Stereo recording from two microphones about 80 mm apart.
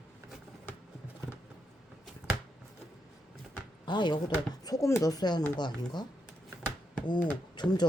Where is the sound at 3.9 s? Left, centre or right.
Left.